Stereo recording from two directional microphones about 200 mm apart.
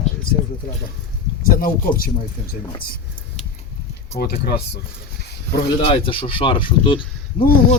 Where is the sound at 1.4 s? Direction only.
45° left (ahead or behind).